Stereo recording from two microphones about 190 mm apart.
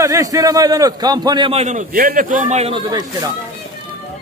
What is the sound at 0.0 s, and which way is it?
A man's voice, 15° right (ahead or behind).